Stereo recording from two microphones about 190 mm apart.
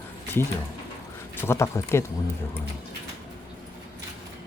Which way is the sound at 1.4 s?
15° left (ahead or behind).